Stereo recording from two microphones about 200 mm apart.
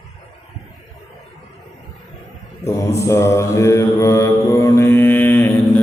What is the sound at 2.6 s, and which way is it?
Mantra, 15° left (ahead or behind).